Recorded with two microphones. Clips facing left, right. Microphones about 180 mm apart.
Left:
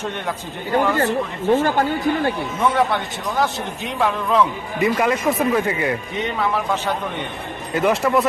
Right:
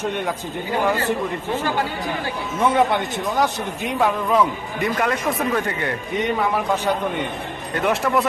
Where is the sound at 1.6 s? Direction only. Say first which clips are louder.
Left 4 dB; 45° left (ahead or behind).